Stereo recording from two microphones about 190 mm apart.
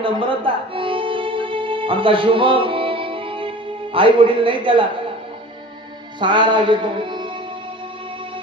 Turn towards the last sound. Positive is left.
turn(degrees=-25)  # may be behind; listen again after turning